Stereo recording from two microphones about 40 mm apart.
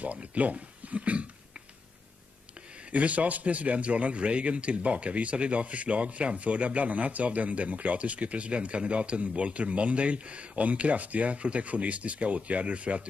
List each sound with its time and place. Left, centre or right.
0.0 s speech: right
2.9 s a man's voice: right